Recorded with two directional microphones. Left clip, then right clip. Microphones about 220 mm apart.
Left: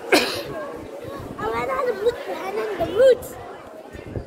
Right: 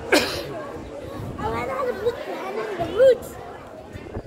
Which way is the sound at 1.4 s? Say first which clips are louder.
Left 2 dB; 45° left (ahead or behind).